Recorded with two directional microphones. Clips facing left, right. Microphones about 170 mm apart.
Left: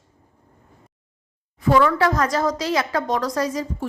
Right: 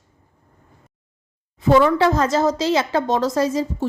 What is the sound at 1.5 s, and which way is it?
Speech, 25° right (ahead or behind).